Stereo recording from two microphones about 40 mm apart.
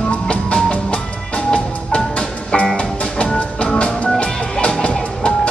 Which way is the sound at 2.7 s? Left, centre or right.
Left.